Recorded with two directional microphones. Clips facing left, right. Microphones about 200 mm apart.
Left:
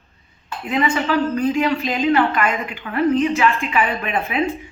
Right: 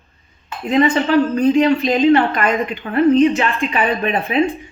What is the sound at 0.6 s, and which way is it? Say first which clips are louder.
A woman's voice: right 5 dB; 35° right (ahead or behind).